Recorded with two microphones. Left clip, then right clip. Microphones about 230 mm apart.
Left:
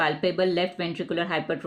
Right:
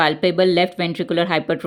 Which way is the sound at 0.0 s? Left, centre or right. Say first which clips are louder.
Right 7 dB; right.